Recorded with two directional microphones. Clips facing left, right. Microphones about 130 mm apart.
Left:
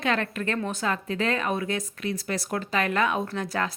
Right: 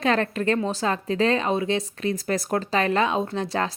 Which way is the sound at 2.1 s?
45° right (ahead or behind).